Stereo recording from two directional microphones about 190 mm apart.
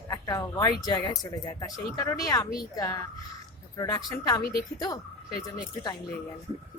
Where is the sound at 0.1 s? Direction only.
15° left (ahead or behind).